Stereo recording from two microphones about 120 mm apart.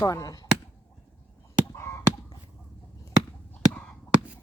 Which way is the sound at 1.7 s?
20° left (ahead or behind).